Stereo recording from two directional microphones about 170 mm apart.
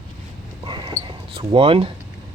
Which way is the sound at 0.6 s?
25° right (ahead or behind).